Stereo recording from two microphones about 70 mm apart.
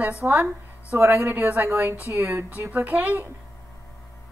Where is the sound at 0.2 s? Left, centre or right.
Right.